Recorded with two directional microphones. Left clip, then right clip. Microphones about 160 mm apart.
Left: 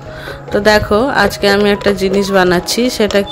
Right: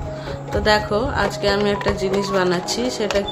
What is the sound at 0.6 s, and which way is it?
Speech, 50° left (ahead or behind).